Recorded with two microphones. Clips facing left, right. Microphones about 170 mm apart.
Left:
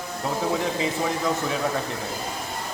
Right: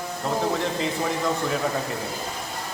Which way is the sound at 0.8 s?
Centre (ahead or behind).